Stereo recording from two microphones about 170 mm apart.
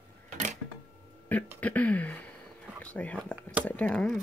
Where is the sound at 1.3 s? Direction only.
10° left (ahead or behind).